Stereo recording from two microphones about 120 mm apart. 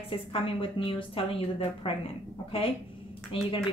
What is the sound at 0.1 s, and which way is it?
Speech, 50° left (ahead or behind).